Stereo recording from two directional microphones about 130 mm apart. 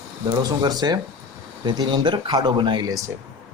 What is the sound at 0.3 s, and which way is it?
A man's voice, 30° right (ahead or behind).